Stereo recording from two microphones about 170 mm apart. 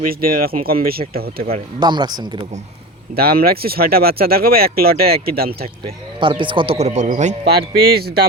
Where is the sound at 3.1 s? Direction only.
65° right (ahead or behind).